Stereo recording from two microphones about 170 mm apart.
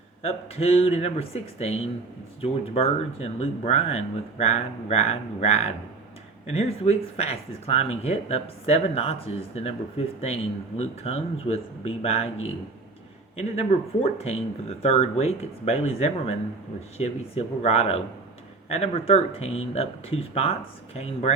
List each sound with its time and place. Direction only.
0.2 s speech: 35° left (ahead or behind)